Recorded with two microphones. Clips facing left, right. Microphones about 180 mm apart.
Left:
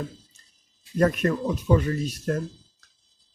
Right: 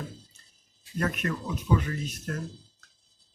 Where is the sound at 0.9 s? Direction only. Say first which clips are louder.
Left 8 dB; 40° left (ahead or behind).